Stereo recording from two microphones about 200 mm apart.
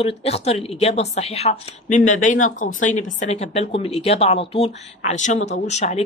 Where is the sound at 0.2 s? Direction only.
30° left (ahead or behind).